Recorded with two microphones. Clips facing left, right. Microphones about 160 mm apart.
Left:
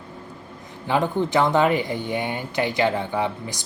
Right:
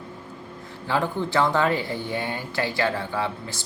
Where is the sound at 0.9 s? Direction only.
20° left (ahead or behind).